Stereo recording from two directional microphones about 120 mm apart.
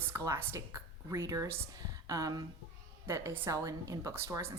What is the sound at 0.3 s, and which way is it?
A woman's voice, 25° right (ahead or behind).